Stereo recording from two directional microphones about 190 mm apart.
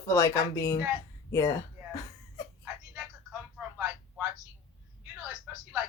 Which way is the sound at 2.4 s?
20° left (ahead or behind).